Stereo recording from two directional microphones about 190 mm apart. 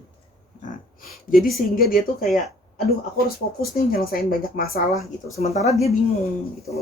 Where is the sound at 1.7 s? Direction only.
50° left (ahead or behind).